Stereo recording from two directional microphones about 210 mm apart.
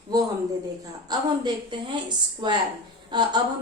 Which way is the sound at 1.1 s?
20° right (ahead or behind).